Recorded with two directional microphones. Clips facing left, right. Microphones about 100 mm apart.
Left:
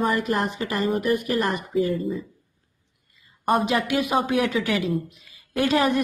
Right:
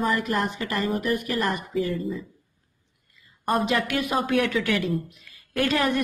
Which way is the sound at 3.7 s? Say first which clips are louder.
Left 2 dB; 20° left (ahead or behind).